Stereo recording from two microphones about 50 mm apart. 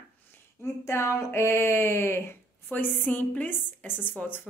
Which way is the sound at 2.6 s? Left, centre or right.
Left.